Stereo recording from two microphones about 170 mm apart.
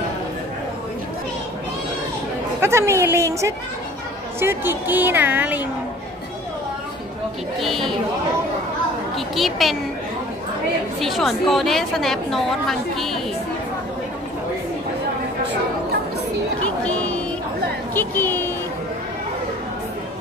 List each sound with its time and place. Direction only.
2.6 s a woman's voice: 15° right (ahead or behind)
7.6 s a woman's voice: centre (ahead or behind)
9.3 s a woman's voice: centre (ahead or behind)
11.0 s a woman's voice: centre (ahead or behind)
16.6 s a sound: 10° left (ahead or behind)